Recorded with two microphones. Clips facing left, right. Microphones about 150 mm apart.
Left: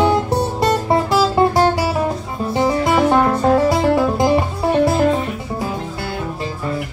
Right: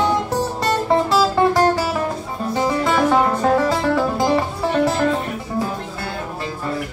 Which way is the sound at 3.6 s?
15° left (ahead or behind).